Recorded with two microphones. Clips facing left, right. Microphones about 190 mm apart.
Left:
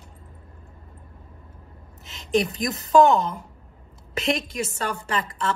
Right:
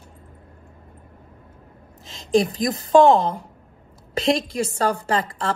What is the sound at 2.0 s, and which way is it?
A woman's voice, 30° right (ahead or behind).